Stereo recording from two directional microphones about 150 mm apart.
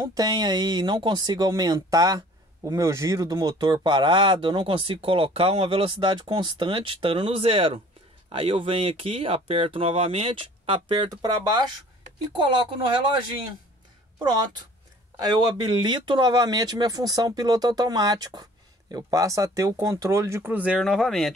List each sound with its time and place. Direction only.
0.0 s speech: 25° right (ahead or behind)
14.1 s speech: 25° right (ahead or behind); by 21.3 s centre (ahead or behind)